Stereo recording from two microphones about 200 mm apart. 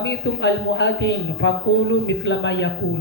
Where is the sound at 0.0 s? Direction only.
65° left (ahead or behind).